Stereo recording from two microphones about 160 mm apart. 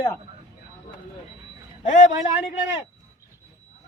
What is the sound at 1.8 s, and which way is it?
Speech, 50° left (ahead or behind).